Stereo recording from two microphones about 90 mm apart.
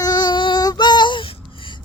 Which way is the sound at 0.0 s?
50° left (ahead or behind).